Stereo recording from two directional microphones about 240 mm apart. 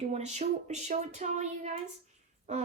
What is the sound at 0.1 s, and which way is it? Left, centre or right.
Speech, right.